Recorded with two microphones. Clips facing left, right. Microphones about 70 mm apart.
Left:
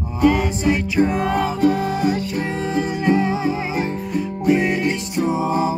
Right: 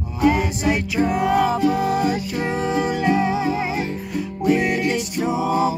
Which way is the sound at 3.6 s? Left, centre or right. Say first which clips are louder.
Left 2 dB; left.